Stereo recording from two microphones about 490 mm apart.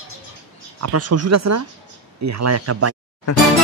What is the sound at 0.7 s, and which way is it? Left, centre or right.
Speech, right.